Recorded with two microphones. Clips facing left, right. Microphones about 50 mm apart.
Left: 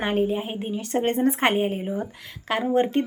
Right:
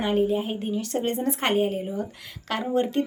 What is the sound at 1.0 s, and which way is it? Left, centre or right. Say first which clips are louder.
Speech: left 7 dB; left.